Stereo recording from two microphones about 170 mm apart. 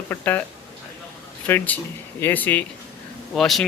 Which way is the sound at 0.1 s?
10° left (ahead or behind).